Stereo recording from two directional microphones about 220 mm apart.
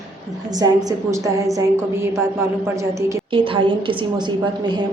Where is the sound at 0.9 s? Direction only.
15° right (ahead or behind).